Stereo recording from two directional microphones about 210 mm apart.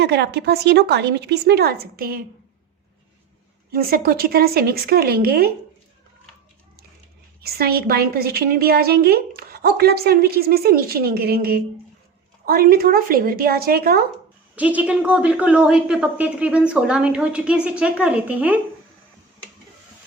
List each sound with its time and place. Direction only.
0.0 s a woman's voice: 50° right (ahead or behind)
3.7 s a woman's voice: 45° right (ahead or behind)
7.4 s a woman's voice: 45° right (ahead or behind)
14.5 s speech: 5° right (ahead or behind)